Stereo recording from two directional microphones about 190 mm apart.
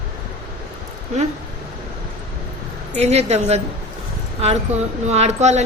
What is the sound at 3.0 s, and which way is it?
Speech, 35° right (ahead or behind).